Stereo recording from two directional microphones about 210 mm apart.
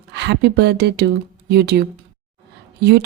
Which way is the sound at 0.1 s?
55° right (ahead or behind).